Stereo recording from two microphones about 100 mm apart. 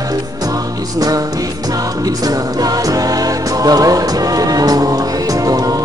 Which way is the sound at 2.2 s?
40° right (ahead or behind).